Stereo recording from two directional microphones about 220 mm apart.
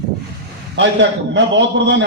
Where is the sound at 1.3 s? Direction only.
55° right (ahead or behind).